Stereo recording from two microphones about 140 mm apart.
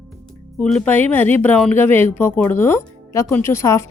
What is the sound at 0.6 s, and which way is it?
Speech, 10° left (ahead or behind).